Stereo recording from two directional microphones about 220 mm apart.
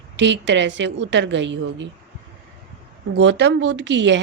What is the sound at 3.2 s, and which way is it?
A woman's voice, 55° right (ahead or behind).